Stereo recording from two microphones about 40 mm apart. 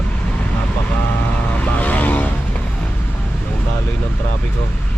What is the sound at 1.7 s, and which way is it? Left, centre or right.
Vehicle, left.